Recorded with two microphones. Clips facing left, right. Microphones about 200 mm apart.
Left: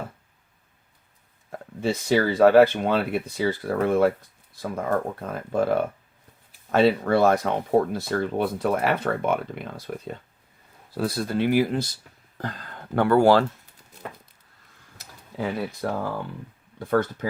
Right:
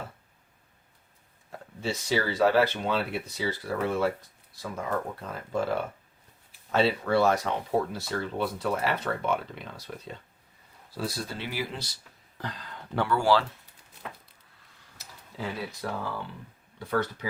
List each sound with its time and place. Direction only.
1.8 s speech: 55° left (ahead or behind)
14.9 s tick-tock: 55° left (ahead or behind)
16.7 s speech: 50° left (ahead or behind)